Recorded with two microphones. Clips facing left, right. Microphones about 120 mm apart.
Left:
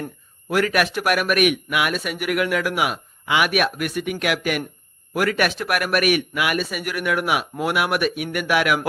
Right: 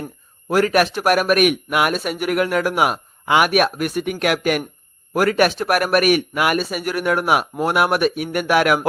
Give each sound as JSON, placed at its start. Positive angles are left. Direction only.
{"t": 0.4, "sound": "speech", "side_deg": -35}